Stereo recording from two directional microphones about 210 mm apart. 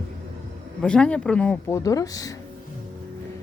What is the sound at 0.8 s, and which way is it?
Speech, 5° left (ahead or behind).